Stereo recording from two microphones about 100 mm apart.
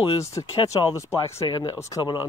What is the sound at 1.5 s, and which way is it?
Speech, 45° left (ahead or behind).